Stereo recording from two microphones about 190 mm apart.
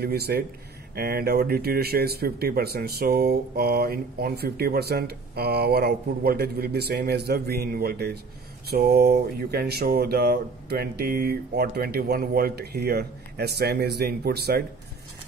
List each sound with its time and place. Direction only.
0.0 s speech: 55° right (ahead or behind)